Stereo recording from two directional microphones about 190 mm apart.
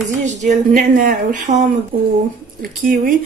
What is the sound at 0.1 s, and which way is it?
Speech, 40° right (ahead or behind).